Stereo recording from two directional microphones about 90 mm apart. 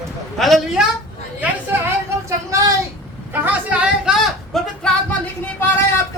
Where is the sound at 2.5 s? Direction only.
40° right (ahead or behind).